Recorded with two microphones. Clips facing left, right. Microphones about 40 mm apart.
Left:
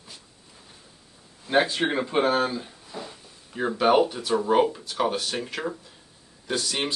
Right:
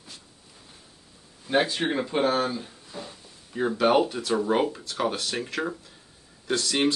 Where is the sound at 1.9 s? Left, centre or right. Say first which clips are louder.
Left 1 dB; left.